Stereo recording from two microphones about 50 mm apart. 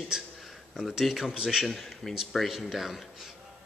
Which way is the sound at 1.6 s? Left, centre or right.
Centre.